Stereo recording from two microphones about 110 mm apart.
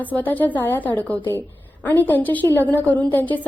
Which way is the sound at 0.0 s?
15° left (ahead or behind).